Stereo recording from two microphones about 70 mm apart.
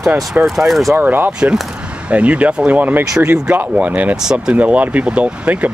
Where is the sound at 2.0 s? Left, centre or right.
Centre.